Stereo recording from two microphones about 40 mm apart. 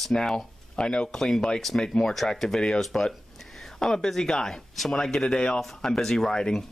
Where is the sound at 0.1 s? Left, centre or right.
Centre.